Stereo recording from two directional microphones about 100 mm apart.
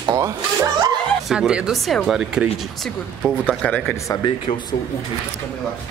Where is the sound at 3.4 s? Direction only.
10° left (ahead or behind).